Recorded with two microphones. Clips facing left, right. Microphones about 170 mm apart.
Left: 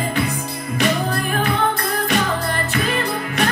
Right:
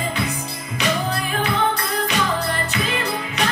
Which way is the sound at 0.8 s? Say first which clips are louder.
Left 2 dB; 50° left (ahead or behind).